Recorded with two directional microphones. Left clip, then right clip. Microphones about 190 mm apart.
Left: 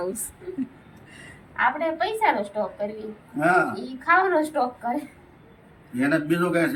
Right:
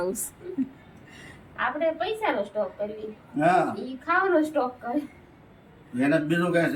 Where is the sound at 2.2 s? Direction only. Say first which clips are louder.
Left 4 dB; 15° right (ahead or behind).